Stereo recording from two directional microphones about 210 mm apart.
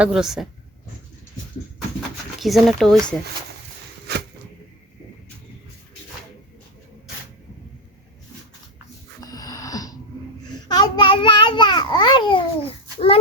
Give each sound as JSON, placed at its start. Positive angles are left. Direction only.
{"t": 0.0, "sound": "speech", "side_deg": 0}
{"t": 2.4, "sound": "speech", "side_deg": 0}
{"t": 9.2, "sound": "a sound", "side_deg": 15}
{"t": 10.7, "sound": "babbling", "side_deg": 20}